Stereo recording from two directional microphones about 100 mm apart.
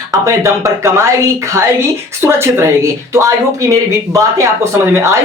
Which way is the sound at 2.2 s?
25° right (ahead or behind).